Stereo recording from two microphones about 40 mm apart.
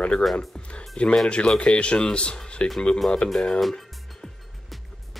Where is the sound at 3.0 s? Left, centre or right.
Centre.